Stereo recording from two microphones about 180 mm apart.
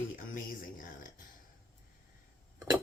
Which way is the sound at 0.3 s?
50° left (ahead or behind).